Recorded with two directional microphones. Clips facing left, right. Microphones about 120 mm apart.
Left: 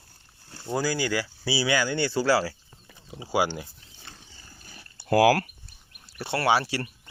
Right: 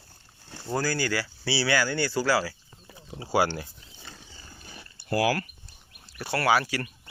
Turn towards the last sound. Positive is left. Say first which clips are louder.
# even
turn(degrees=30)  # may be behind; listen again after turning